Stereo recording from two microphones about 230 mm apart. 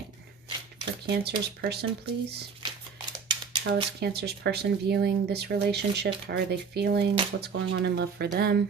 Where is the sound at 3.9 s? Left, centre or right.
Right.